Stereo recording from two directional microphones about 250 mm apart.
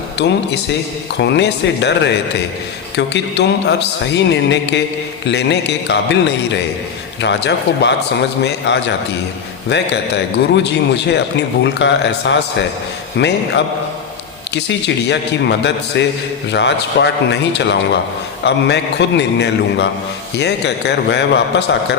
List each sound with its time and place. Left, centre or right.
0.2 s a man's voice: left